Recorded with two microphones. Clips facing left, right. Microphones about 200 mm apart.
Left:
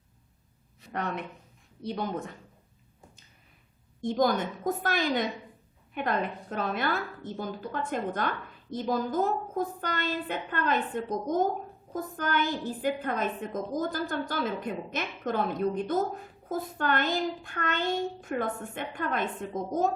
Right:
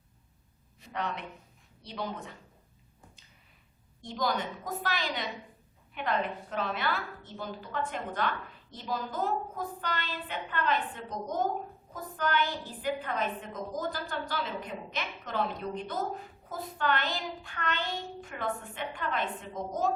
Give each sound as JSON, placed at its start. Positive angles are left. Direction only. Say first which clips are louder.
{"t": 0.9, "sound": "a woman's voice", "louder": "left 3 dB", "side_deg": 50}
{"t": 4.0, "sound": "a woman's voice", "louder": "left 6 dB", "side_deg": 50}